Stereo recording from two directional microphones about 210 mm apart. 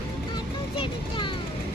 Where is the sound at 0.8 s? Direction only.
25° left (ahead or behind).